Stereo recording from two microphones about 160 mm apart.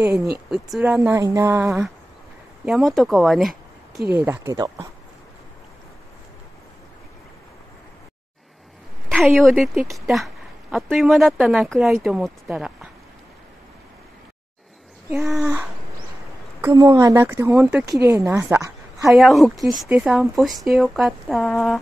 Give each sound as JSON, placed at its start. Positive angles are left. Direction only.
{"t": 0.5, "sound": "a woman's voice", "side_deg": -5}
{"t": 1.2, "sound": "a sound", "side_deg": -20}
{"t": 2.6, "sound": "a woman's voice", "side_deg": 0}
{"t": 4.1, "sound": "speech", "side_deg": -15}
{"t": 9.1, "sound": "a woman's voice", "side_deg": 0}
{"t": 15.0, "sound": "speech", "side_deg": -15}
{"t": 16.6, "sound": "speech", "side_deg": -20}
{"t": 17.8, "sound": "speech", "side_deg": -20}
{"t": 19.0, "sound": "a woman's voice", "side_deg": 0}